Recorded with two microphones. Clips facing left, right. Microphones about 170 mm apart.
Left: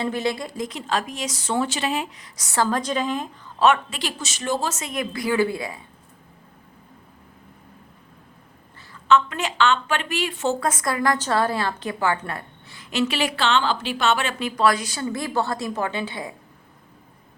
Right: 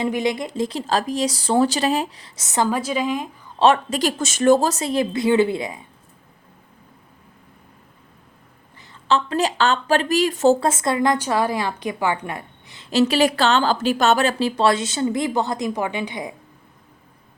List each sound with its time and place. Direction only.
0.0 s speech: 15° right (ahead or behind)
2.6 s a woman's voice: 10° right (ahead or behind)
3.6 s speech: 35° right (ahead or behind); by 5.8 s 20° right (ahead or behind)
8.9 s a woman's voice: 30° right (ahead or behind)
12.9 s a woman's voice: 35° right (ahead or behind); by 16.3 s 15° right (ahead or behind)